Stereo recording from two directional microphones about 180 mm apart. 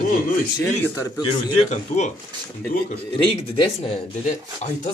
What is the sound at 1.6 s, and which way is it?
Speech, 40° left (ahead or behind).